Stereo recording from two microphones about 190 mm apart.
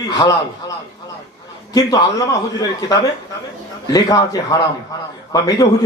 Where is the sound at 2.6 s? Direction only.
20° left (ahead or behind).